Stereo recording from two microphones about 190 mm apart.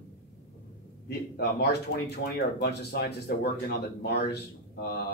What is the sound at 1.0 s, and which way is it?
Speech, 60° left (ahead or behind).